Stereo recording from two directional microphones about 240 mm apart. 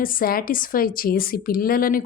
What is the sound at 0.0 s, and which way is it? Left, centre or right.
A woman's voice, left.